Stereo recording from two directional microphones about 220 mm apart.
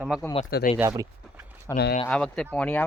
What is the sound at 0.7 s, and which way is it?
Speech, 15° right (ahead or behind).